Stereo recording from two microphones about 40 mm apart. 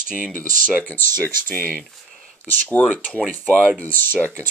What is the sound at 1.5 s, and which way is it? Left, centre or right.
Speech, left.